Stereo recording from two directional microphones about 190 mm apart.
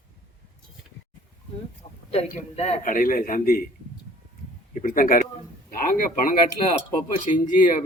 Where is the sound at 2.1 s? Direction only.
35° left (ahead or behind).